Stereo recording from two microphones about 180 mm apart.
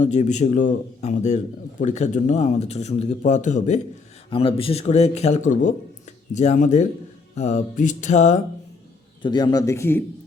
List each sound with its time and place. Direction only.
0.0 s a man's voice: 40° left (ahead or behind)
4.3 s a man's voice: 30° left (ahead or behind)
9.2 s a man's voice: 25° left (ahead or behind)